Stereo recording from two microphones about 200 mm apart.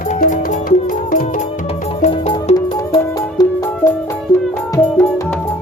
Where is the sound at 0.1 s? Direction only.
35° left (ahead or behind).